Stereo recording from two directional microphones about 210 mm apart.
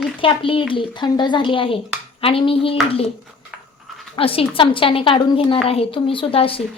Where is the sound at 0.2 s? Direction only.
25° left (ahead or behind).